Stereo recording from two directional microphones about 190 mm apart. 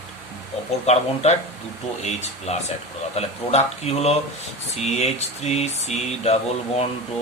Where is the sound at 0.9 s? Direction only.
35° left (ahead or behind).